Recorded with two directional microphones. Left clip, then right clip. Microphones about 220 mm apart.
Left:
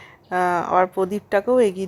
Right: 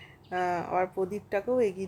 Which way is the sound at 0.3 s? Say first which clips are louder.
Left 10 dB; 15° left (ahead or behind).